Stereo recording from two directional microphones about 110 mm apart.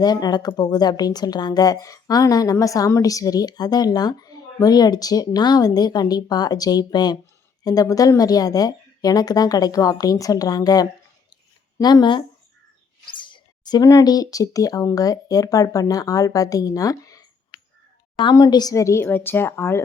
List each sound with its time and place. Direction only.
0.0 s a woman's voice: 40° left (ahead or behind)
13.1 s a sound: 45° left (ahead or behind)
13.8 s a woman's voice: 30° left (ahead or behind)
19.0 s speech: 20° left (ahead or behind)